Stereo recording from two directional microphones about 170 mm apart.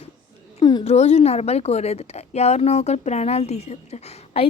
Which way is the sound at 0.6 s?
25° left (ahead or behind).